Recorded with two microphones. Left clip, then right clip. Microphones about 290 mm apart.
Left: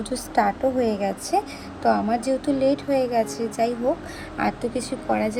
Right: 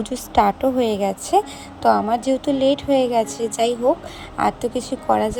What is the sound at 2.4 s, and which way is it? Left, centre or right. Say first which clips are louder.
Speech: right 3 dB; right.